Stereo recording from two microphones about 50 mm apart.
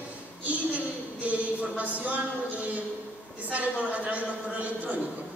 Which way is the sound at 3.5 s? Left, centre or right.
Right.